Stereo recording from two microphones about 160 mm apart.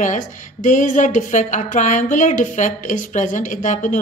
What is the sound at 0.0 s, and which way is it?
A woman's voice, 50° left (ahead or behind).